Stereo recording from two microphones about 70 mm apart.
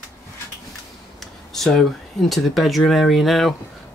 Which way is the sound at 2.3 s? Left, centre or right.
Centre.